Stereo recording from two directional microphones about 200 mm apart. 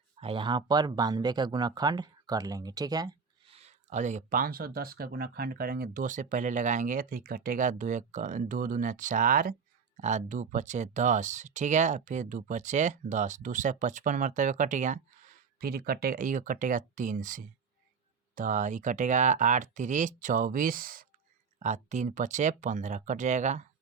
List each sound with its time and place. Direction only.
0.2 s speech: 25° right (ahead or behind)